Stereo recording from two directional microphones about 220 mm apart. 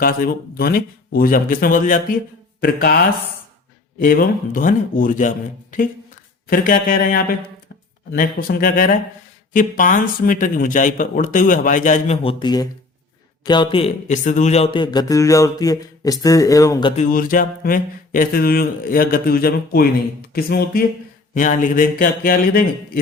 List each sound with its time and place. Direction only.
0.0 s speech: 40° left (ahead or behind)
4.0 s speech: 40° left (ahead or behind)
6.5 s a man's voice: 40° left (ahead or behind); by 16.9 s 15° left (ahead or behind)
16.9 s speech: 35° left (ahead or behind)